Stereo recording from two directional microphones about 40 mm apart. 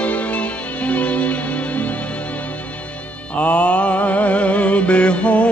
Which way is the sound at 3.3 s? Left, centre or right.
Left.